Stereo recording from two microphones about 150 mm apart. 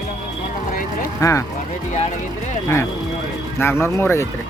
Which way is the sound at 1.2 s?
20° left (ahead or behind).